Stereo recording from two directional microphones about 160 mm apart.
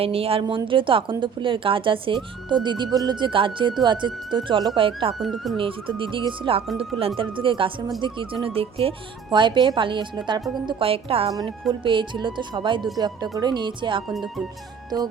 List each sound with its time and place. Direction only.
0.0 s speech: 35° right (ahead or behind)
5.2 s speech: centre (ahead or behind)
5.5 s speech: 30° right (ahead or behind)
11.3 s speech: 25° right (ahead or behind)
14.1 s speech: centre (ahead or behind)
14.8 s music: 25° right (ahead or behind)